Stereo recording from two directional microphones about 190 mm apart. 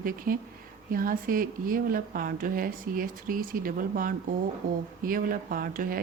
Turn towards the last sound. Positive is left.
turn(degrees=-50)  # may be behind; listen again after turning